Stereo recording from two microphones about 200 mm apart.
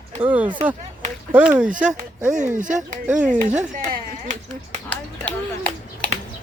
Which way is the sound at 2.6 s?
40° right (ahead or behind).